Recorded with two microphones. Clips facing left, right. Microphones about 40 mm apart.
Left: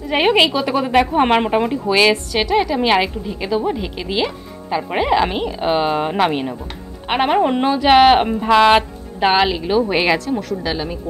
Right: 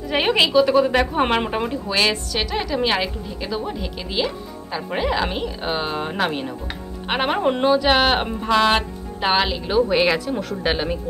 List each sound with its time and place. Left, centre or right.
0.1 s speech: centre
7.1 s speech: centre
7.3 s speech: centre
9.2 s speech: centre
10.1 s a woman's voice: centre
10.6 s speech: right